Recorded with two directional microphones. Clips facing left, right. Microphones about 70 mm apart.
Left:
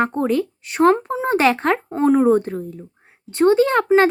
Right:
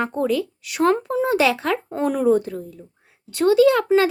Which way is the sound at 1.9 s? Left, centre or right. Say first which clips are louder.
Left 6 dB; left.